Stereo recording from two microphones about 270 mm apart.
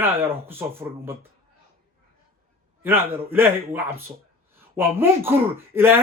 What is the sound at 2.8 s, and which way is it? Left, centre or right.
Speech, centre.